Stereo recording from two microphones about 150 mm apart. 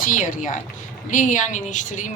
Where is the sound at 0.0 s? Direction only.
60° left (ahead or behind).